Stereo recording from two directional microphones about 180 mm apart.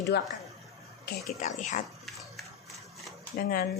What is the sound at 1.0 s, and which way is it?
Speech, 45° left (ahead or behind).